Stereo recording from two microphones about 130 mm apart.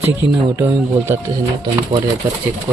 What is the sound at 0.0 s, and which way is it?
Speech, 15° right (ahead or behind).